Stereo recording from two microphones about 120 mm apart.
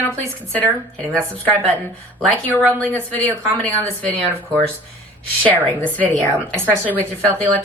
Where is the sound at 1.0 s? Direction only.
10° left (ahead or behind).